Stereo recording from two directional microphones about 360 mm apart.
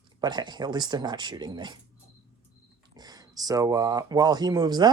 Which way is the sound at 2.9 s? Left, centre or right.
Centre.